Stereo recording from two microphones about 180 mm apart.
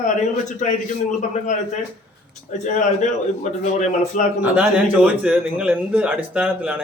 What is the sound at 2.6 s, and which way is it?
Speech, 40° left (ahead or behind).